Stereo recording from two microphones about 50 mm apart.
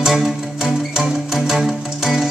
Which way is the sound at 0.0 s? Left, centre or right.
Centre.